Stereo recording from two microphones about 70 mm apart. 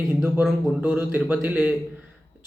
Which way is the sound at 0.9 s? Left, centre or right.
Right.